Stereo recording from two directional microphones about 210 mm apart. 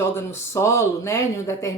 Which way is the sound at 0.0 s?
10° left (ahead or behind).